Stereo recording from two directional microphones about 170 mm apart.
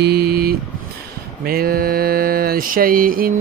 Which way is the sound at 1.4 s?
60° right (ahead or behind).